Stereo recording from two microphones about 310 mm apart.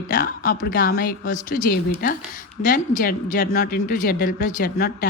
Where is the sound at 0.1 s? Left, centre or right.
Left.